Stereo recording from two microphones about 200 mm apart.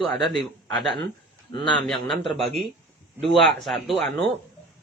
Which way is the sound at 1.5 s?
25° left (ahead or behind).